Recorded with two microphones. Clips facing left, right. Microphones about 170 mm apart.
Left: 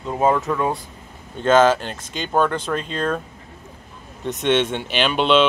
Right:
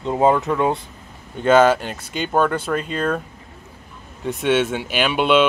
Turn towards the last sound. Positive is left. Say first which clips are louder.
# even
turn(degrees=-5)  # may be behind; listen again after turning